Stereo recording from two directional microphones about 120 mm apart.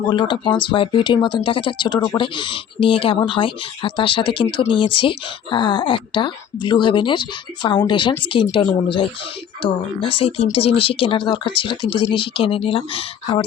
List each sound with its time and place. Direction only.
0.0 s speech: 40° left (ahead or behind)